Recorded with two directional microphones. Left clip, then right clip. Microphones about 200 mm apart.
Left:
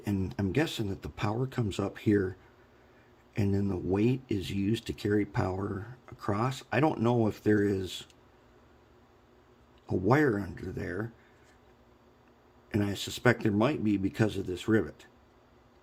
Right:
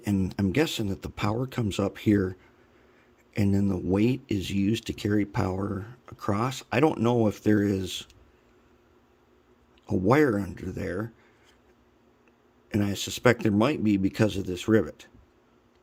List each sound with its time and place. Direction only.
0.0 s speech: 25° right (ahead or behind)
3.3 s speech: 30° right (ahead or behind)
9.8 s speech: 25° right (ahead or behind)
12.7 s speech: 25° right (ahead or behind)